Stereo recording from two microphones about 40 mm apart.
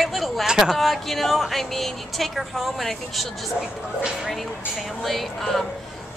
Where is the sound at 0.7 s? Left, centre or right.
Centre.